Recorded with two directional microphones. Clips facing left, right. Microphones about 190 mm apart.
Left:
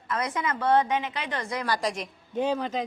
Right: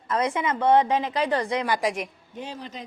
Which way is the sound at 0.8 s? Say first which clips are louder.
Right 5 dB; 35° right (ahead or behind).